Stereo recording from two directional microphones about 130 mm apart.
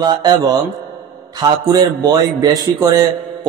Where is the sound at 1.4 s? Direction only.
30° right (ahead or behind).